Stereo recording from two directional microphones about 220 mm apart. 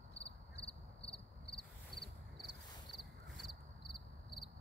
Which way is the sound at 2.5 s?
20° left (ahead or behind).